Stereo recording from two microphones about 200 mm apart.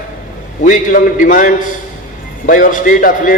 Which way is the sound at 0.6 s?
40° left (ahead or behind).